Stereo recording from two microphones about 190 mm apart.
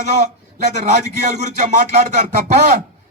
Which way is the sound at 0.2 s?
35° right (ahead or behind).